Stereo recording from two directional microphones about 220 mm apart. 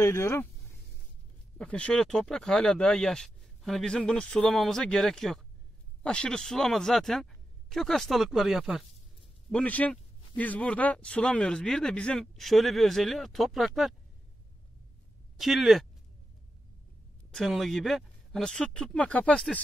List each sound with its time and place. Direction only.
0.0 s speech: 10° left (ahead or behind)
1.6 s speech: 5° left (ahead or behind)
15.3 s speech: centre (ahead or behind)
17.3 s speech: centre (ahead or behind)